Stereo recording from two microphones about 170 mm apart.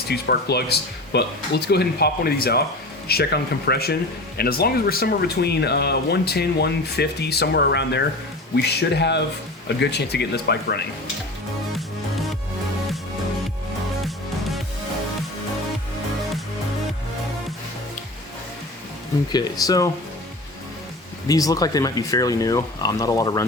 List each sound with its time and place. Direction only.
0.1 s speech: 75° left (ahead or behind)
8.5 s speech: 75° left (ahead or behind)
19.3 s speech: 25° left (ahead or behind)
21.2 s speech: 20° left (ahead or behind)